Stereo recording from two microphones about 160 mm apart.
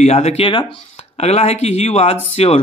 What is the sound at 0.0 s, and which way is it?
Speech, 45° left (ahead or behind).